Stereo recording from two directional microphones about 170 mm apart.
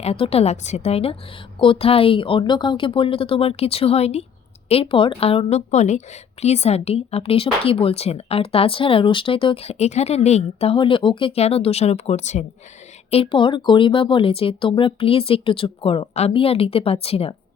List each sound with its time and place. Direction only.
0.0 s speech: 35° left (ahead or behind)
13.1 s speech: 35° left (ahead or behind)